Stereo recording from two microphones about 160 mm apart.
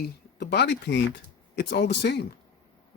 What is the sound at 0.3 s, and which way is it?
Speech, 90° left.